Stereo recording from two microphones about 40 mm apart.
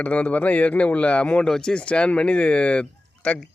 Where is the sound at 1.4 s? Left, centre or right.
Centre.